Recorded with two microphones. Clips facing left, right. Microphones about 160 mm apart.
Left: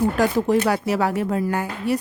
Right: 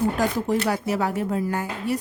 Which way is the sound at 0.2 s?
75° left (ahead or behind).